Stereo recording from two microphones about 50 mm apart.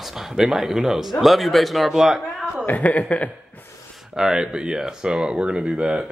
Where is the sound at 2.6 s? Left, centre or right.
Left.